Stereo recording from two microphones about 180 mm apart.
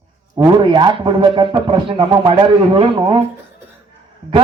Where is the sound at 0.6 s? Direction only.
25° right (ahead or behind).